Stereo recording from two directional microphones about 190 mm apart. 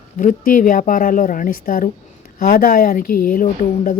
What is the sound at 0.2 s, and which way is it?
Speech, 45° left (ahead or behind).